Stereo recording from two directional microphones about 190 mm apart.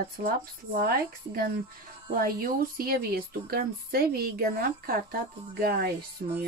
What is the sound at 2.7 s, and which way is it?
Speech, 50° right (ahead or behind).